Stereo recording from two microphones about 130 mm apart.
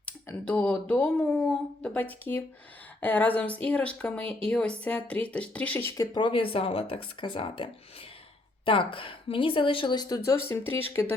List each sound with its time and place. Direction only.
0.0 s speech: 10° left (ahead or behind)
6.0 s a woman's voice: 35° left (ahead or behind); by 10.8 s 15° left (ahead or behind)